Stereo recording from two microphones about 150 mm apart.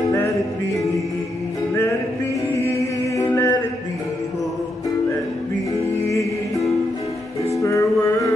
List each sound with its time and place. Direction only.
2.6 s music: 20° left (ahead or behind)
7.6 s music: 20° left (ahead or behind)